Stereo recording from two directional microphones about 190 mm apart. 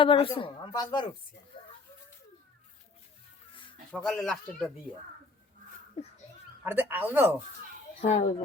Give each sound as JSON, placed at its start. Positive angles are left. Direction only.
{"t": 0.0, "sound": "speech", "side_deg": 30}
{"t": 1.5, "sound": "a sound", "side_deg": 25}
{"t": 3.5, "sound": "a sound", "side_deg": 25}
{"t": 3.9, "sound": "speech", "side_deg": 5}
{"t": 6.7, "sound": "speech", "side_deg": -10}
{"t": 8.0, "sound": "speech", "side_deg": 35}